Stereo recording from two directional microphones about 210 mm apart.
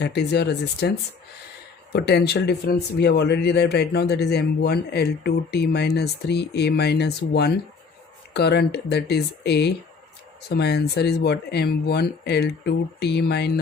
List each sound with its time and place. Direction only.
0.0 s speech: 55° left (ahead or behind)